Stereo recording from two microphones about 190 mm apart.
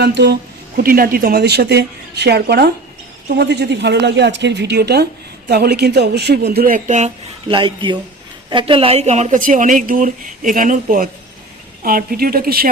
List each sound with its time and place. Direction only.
0.0 s a woman's voice: 60° right (ahead or behind); by 7.1 s 40° right (ahead or behind)
7.4 s speech: 25° right (ahead or behind); by 12.6 s 50° right (ahead or behind)